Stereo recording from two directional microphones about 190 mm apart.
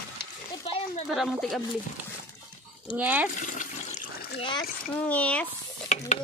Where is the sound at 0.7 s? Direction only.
30° left (ahead or behind).